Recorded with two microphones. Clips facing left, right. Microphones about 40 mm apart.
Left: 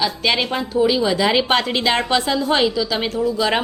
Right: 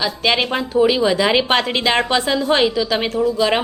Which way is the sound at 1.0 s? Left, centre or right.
Centre.